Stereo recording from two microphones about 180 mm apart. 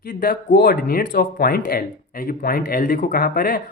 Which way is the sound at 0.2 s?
55° left (ahead or behind).